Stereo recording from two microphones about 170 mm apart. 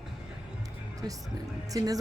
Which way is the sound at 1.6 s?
20° right (ahead or behind).